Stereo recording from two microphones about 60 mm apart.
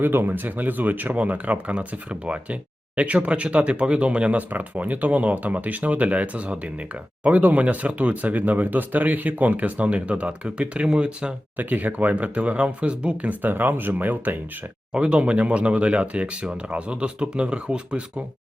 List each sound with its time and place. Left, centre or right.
0.0 s speech: right; by 11.3 s centre
11.5 s speech: right
13.4 s speech: right
14.9 s speech: centre